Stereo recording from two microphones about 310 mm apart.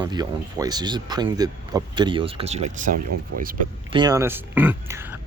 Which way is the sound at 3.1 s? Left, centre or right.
Right.